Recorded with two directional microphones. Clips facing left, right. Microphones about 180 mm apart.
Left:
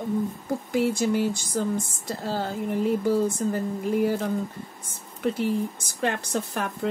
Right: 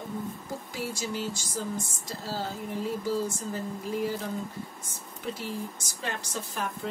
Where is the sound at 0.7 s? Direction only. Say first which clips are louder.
Left 12 dB; 60° left (ahead or behind).